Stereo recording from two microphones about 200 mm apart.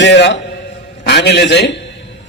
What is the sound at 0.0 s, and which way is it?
A man's voice, 60° left (ahead or behind).